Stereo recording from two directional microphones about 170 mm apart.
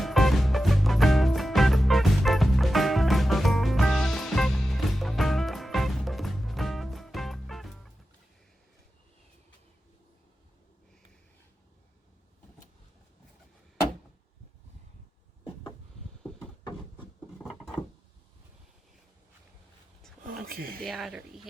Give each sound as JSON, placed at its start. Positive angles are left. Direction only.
{"t": 0.0, "sound": "music", "side_deg": 0}
{"t": 20.2, "sound": "a sound", "side_deg": -60}
{"t": 20.8, "sound": "speech", "side_deg": 0}